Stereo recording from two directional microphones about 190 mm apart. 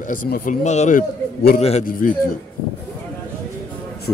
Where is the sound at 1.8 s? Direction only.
45° left (ahead or behind).